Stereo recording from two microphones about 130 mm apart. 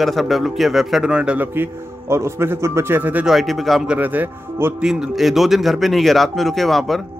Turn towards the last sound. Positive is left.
turn(degrees=0)  # may be behind; listen again after turning